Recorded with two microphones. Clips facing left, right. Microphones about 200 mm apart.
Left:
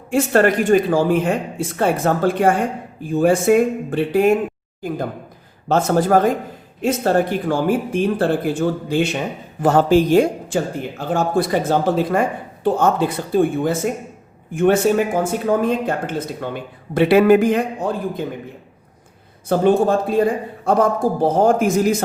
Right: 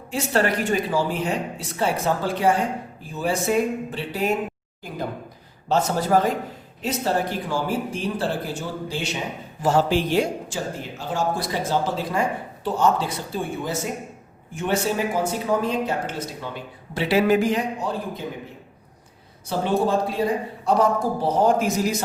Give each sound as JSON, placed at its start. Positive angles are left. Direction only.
{"t": 0.1, "sound": "speech", "side_deg": 50}
{"t": 5.6, "sound": "speech", "side_deg": 50}
{"t": 19.5, "sound": "speech", "side_deg": 50}